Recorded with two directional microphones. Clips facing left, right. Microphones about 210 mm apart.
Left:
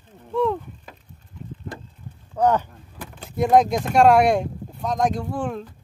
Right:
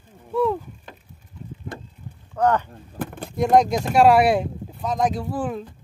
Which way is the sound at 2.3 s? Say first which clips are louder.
Left 1 dB; 10° left (ahead or behind).